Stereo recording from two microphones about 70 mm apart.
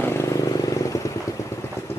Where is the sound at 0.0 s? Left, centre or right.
Left.